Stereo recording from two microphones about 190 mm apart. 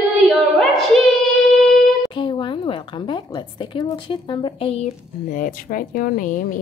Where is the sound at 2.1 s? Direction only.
25° left (ahead or behind).